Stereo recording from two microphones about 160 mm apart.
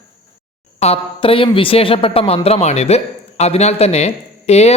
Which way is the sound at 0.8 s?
40° left (ahead or behind).